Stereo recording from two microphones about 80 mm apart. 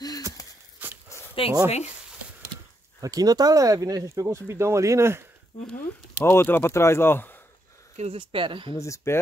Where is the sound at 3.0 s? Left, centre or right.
Right.